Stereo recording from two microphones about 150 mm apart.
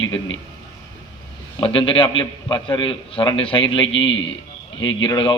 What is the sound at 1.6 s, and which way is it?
A man's voice, 35° left (ahead or behind).